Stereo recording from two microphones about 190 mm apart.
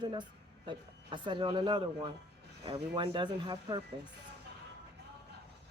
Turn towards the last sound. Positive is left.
turn(degrees=-25)  # may be behind; listen again after turning